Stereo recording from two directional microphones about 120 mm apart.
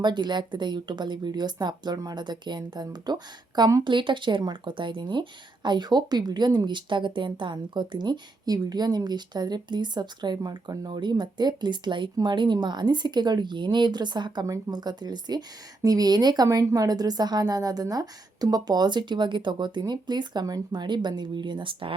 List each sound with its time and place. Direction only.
0.0 s speech: 40° right (ahead or behind)
3.8 s speech: 40° right (ahead or behind)